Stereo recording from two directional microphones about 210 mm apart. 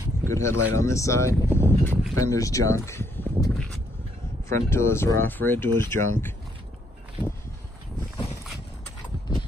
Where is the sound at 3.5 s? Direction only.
Centre (ahead or behind).